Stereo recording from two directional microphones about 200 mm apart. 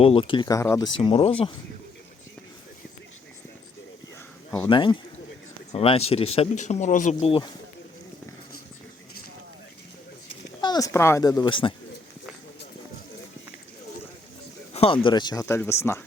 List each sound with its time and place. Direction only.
0.0 s speech: 30° left (ahead or behind)
4.7 s speech: 25° left (ahead or behind)
10.6 s speech: 20° left (ahead or behind)
14.7 s a sound: 30° left (ahead or behind)
15.0 s speech: 20° left (ahead or behind)